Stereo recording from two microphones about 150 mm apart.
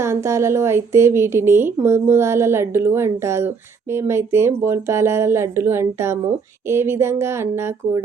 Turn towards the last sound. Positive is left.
turn(degrees=-15)  # may be behind; listen again after turning